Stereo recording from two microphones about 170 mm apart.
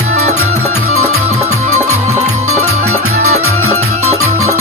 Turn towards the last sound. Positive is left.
turn(degrees=-40)  # may be behind; listen again after turning